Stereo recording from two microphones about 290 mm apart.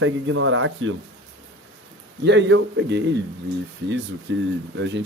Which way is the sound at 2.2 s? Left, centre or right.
Right.